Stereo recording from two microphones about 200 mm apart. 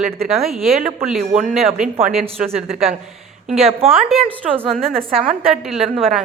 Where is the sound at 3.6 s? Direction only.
30° right (ahead or behind).